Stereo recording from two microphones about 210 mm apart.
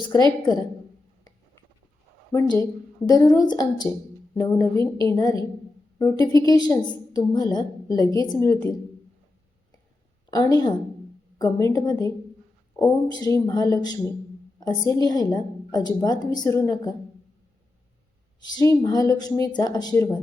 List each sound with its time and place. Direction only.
0.0 s a woman's voice: 20° left (ahead or behind)
2.3 s a woman's voice: 15° left (ahead or behind)
10.3 s a woman's voice: 20° left (ahead or behind)
18.3 s a woman's voice: 15° left (ahead or behind)